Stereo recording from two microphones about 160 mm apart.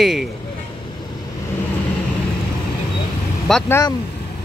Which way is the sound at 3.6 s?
15° left (ahead or behind).